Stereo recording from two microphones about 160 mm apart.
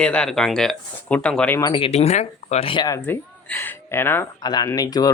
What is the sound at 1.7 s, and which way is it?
Speech, 35° left (ahead or behind).